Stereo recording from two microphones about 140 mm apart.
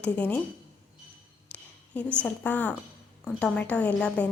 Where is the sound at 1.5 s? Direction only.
10° left (ahead or behind).